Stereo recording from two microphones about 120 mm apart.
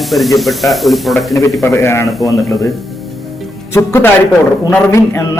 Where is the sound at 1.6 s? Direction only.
20° left (ahead or behind).